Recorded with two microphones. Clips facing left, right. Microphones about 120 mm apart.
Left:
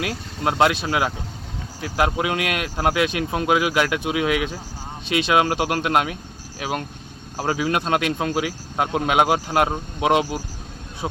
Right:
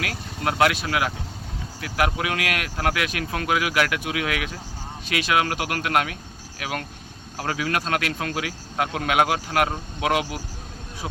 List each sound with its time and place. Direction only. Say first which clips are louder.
0.0 s speech: left 3 dB; 25° left (ahead or behind)